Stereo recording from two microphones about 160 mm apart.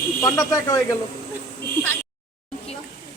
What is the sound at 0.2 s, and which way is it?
Speech, 20° left (ahead or behind).